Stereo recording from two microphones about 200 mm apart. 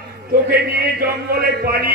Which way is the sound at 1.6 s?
50° right (ahead or behind).